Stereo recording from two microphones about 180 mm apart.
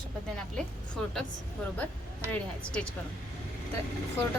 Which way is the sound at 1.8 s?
10° left (ahead or behind).